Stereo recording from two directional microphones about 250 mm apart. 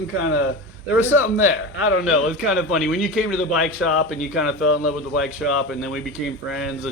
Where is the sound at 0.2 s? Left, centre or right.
Left.